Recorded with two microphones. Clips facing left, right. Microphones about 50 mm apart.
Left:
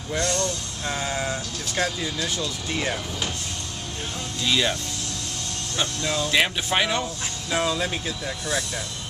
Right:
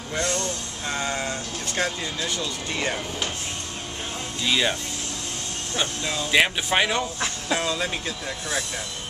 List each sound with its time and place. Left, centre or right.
0.2 s speech: right
0.8 s vehicle: centre
2.7 s speech: centre
4.5 s speech: centre
5.8 s speech: centre